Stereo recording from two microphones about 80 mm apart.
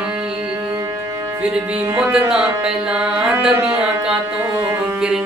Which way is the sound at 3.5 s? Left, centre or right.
Centre.